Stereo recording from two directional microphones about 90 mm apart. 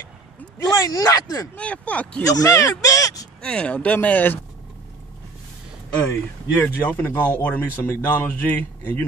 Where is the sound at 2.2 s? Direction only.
40° left (ahead or behind).